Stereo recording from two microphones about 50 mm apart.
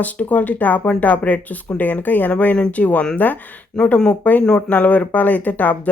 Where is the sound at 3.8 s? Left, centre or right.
Centre.